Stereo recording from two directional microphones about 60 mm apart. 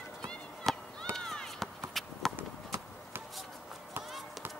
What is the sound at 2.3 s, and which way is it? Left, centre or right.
Run, right.